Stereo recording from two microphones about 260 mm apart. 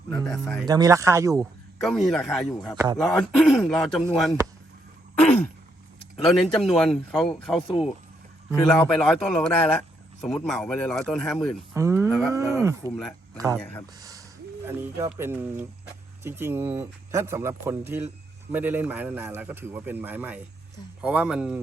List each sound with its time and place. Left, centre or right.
0.1 s a man's voice: centre
0.7 s speech: centre
1.8 s a man's voice: centre
2.7 s speech: centre
3.0 s a man's voice: centre
5.2 s a sound: centre
6.2 s a man's voice: centre
11.7 s speech: centre
14.0 s a sound: centre
14.8 s a man's voice: centre